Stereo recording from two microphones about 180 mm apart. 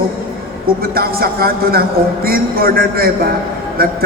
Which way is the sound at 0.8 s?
55° right (ahead or behind).